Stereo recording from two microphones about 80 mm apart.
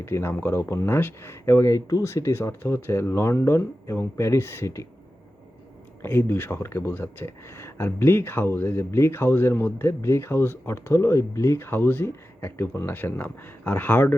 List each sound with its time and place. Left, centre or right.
0.0 s speech: left
6.0 s speech: left